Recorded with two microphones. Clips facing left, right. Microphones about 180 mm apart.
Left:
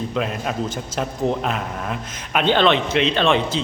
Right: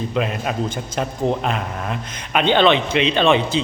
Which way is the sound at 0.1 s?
5° right (ahead or behind).